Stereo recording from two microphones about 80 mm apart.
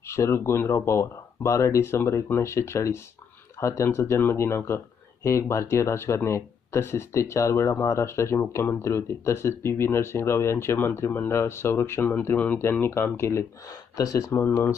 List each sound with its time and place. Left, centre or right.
0.1 s speech: left
13.7 s speech: left